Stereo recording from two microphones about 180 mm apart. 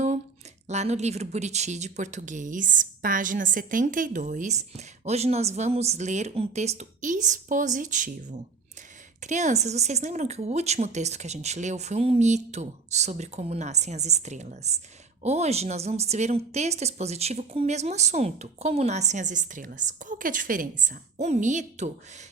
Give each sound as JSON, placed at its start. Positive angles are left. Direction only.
{"t": 0.7, "sound": "speech", "side_deg": -40}